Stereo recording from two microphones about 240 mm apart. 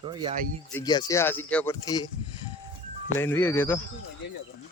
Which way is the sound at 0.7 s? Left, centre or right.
Centre.